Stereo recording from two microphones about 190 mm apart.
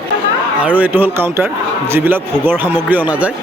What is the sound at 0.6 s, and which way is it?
Speech, 10° right (ahead or behind).